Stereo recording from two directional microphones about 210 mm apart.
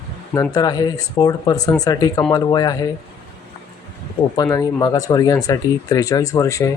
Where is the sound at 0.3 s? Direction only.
15° left (ahead or behind).